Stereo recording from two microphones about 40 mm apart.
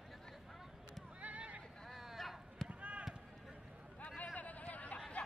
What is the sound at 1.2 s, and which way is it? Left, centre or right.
Horse, right.